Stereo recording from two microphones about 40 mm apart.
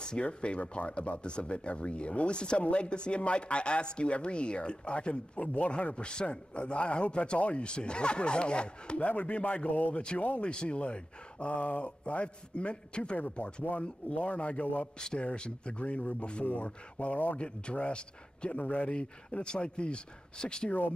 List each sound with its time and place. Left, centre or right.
0.0 s speech: left
7.3 s speech: left
7.6 s speech: left
10.4 s speech: left
15.1 s speech: left
18.6 s speech: left